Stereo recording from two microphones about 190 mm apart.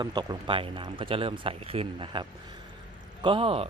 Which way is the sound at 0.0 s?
25° right (ahead or behind).